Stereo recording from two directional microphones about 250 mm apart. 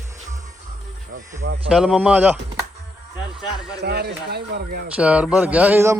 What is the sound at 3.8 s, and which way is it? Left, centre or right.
Speech, right.